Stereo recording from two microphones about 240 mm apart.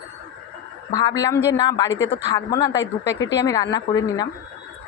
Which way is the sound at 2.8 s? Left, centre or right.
Left.